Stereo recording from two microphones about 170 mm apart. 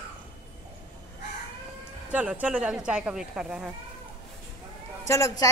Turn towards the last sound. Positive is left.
turn(degrees=20)  # may be behind; listen again after turning